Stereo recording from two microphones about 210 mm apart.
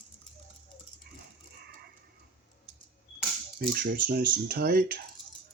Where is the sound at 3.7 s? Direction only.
45° right (ahead or behind).